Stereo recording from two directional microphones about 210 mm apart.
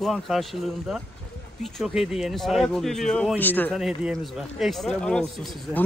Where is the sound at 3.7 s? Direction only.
5° right (ahead or behind).